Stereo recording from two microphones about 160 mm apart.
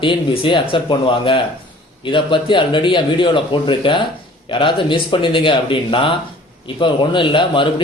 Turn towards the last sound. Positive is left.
turn(degrees=30)  # may be behind; listen again after turning